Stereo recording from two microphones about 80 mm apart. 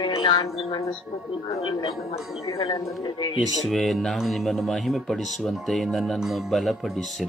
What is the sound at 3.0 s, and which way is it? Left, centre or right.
Speech, left.